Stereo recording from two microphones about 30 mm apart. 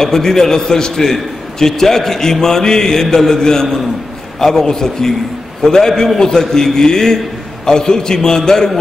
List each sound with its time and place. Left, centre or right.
0.0 s a man's voice: centre